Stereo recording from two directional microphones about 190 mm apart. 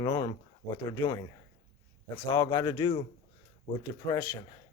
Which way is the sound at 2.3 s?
20° left (ahead or behind).